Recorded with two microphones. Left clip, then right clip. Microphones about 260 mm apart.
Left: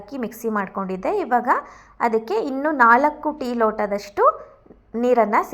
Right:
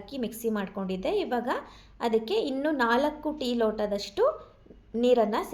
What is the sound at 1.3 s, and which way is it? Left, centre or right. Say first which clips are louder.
Speech: left 11 dB; centre.